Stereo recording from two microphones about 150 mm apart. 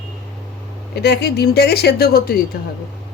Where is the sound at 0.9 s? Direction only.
90° left.